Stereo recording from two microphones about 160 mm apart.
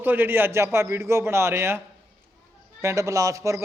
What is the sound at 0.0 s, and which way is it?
A man's voice, 10° right (ahead or behind).